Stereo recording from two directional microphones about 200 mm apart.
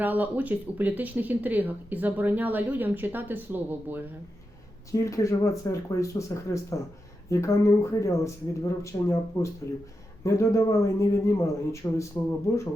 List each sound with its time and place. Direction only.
0.0 s speech: 10° right (ahead or behind)
4.9 s speech: 15° left (ahead or behind)